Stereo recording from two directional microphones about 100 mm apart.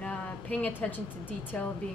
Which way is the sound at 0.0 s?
15° left (ahead or behind).